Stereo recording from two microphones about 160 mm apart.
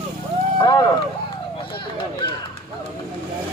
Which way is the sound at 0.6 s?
25° left (ahead or behind).